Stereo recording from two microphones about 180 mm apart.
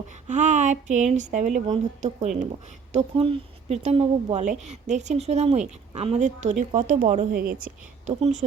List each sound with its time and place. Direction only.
0.3 s speech: 40° right (ahead or behind)
2.0 s a woman's voice: 30° right (ahead or behind)